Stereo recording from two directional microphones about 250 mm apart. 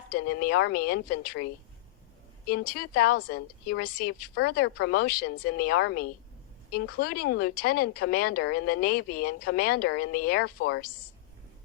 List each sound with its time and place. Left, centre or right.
0.1 s a woman's voice: left
2.5 s a woman's voice: left